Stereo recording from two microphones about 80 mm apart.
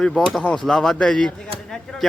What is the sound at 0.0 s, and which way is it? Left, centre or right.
Speech, centre.